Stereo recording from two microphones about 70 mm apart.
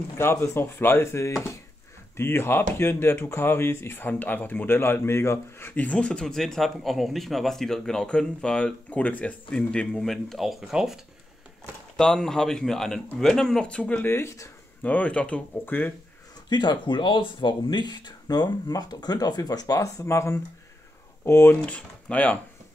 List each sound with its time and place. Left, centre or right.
0.2 s speech: left
2.1 s speech: left
4.1 s speech: left
5.8 s speech: centre
10.1 s speech: centre
12.0 s speech: centre
14.0 s speech: left
14.8 s speech: left
15.6 s speech: left
16.4 s speech: left
21.6 s speech: centre